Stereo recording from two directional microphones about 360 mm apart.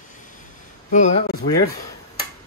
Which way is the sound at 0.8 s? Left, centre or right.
Centre.